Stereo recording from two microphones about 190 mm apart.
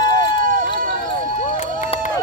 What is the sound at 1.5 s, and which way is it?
Run, 35° left (ahead or behind).